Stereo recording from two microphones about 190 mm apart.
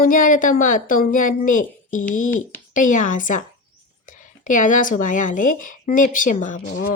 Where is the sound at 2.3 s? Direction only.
10° left (ahead or behind).